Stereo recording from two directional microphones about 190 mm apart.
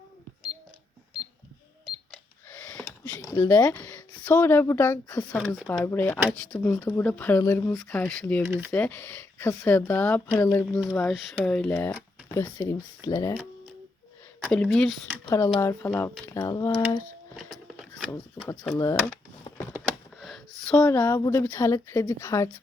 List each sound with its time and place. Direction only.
3.1 s speech: 15° left (ahead or behind)
10.9 s speech: centre (ahead or behind); by 13.3 s 15° left (ahead or behind)
14.4 s speech: 5° left (ahead or behind)
15.3 s speech: 25° left (ahead or behind)
15.6 s speech: 10° left (ahead or behind)
17.3 s a sound: 5° left (ahead or behind)
18.7 s speech: 15° left (ahead or behind)
19.7 s a sound: 5° right (ahead or behind)
21.1 s speech: 15° left (ahead or behind)